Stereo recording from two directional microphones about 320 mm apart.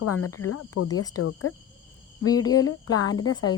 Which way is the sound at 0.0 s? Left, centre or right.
Left.